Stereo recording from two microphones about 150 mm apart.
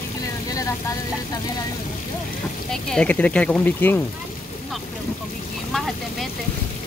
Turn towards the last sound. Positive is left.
turn(degrees=0)  # may be behind; listen again after turning